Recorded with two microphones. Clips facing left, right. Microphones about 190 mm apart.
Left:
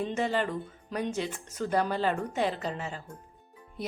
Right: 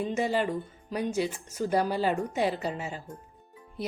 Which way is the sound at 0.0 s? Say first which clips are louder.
Right 2 dB; 10° right (ahead or behind).